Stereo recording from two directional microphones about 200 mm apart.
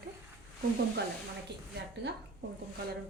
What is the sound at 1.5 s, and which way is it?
Speech, 55° right (ahead or behind).